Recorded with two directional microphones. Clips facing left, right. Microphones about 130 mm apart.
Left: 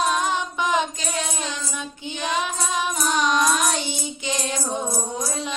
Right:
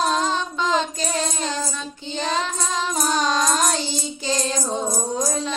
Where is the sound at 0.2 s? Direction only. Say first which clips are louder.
Right 1 dB; 15° left (ahead or behind).